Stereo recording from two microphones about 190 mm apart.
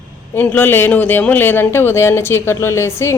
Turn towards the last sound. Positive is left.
turn(degrees=15)  # may be behind; listen again after turning